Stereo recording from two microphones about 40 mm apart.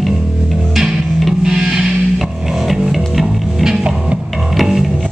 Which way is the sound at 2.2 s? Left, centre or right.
Centre.